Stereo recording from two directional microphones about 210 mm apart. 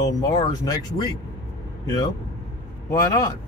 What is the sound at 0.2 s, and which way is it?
Speech, 15° left (ahead or behind).